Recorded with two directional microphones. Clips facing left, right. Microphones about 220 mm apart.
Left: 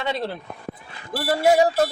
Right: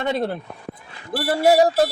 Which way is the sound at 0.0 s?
50° right (ahead or behind).